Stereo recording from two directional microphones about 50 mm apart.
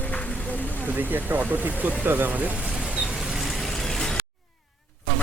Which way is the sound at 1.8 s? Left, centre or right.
Right.